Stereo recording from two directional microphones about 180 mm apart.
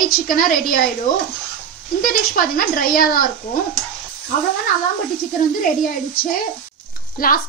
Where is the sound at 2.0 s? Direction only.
50° left (ahead or behind).